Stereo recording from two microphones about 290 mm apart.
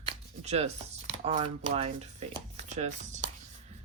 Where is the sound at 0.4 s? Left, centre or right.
Right.